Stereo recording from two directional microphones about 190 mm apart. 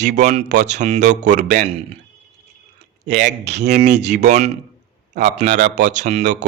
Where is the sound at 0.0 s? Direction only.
40° right (ahead or behind).